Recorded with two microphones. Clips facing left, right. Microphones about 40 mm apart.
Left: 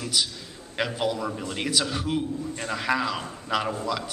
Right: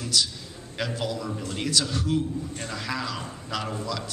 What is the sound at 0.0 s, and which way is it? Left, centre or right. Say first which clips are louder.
A man's voice: right 1 dB; centre.